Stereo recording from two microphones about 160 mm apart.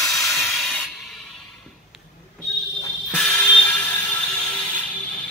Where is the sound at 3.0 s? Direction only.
5° left (ahead or behind).